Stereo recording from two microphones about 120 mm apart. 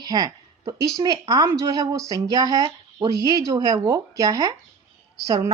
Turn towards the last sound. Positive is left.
turn(degrees=-25)  # may be behind; listen again after turning